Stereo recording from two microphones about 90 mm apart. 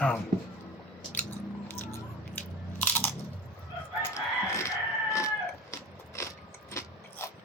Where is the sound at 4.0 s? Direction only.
35° left (ahead or behind).